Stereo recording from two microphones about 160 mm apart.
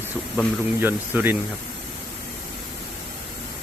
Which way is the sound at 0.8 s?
10° right (ahead or behind).